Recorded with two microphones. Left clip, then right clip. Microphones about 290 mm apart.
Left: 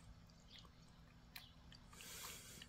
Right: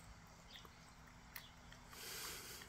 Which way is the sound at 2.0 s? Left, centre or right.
Centre.